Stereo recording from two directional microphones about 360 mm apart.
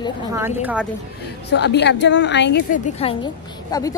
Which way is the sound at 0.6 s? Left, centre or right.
Centre.